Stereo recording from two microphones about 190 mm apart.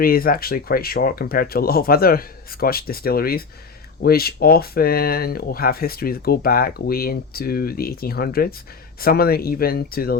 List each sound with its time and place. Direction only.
0.0 s speech: 50° left (ahead or behind)